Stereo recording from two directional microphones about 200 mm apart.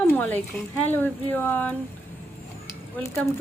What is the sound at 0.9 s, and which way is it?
Speech, 10° left (ahead or behind).